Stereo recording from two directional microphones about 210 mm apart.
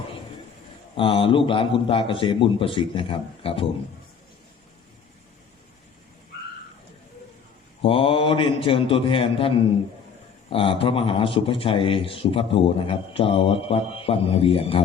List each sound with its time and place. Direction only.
0.9 s speech: 25° left (ahead or behind)
7.8 s speech: 25° left (ahead or behind)